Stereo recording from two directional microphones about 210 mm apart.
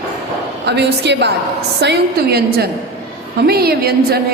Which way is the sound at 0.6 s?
55° right (ahead or behind).